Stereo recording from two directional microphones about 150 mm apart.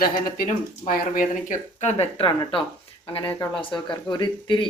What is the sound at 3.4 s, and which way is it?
A woman's voice, 35° left (ahead or behind).